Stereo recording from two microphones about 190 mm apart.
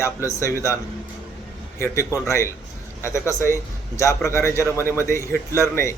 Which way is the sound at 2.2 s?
15° left (ahead or behind).